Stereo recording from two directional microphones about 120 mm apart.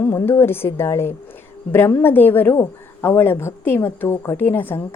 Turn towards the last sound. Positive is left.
turn(degrees=15)  # may be behind; listen again after turning